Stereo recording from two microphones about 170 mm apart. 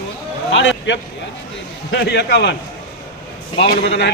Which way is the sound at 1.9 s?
80° left.